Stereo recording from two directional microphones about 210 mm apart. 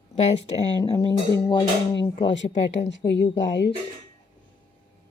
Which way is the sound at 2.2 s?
60° left (ahead or behind).